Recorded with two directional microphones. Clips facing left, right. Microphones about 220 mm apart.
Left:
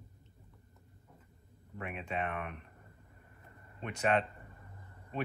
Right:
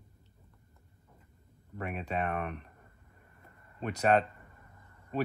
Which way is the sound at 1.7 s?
40° right (ahead or behind).